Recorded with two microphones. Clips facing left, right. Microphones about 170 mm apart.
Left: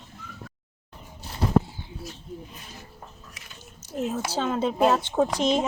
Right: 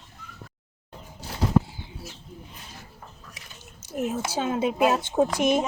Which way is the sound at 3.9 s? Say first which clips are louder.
Even; 10° right (ahead or behind).